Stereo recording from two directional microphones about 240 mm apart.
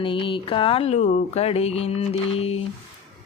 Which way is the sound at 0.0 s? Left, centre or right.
Left.